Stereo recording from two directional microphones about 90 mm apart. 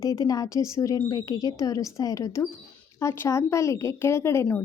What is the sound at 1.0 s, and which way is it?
A woman's voice, 45° left (ahead or behind).